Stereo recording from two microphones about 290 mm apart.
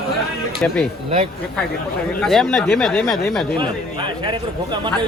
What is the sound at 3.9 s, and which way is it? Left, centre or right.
Speech, centre.